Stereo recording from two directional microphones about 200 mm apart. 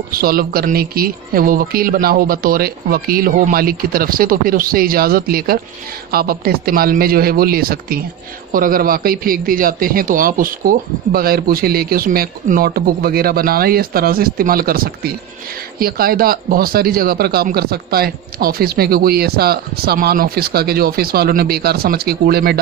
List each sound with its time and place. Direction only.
0.1 s speech: 45° right (ahead or behind)